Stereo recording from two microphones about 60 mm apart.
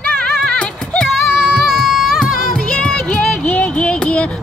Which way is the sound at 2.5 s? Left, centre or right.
Centre.